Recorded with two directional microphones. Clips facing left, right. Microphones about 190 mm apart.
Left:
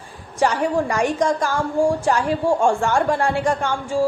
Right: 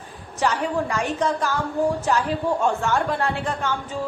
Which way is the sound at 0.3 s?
10° left (ahead or behind).